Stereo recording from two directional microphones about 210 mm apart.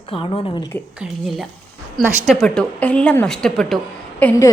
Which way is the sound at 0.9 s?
Centre (ahead or behind).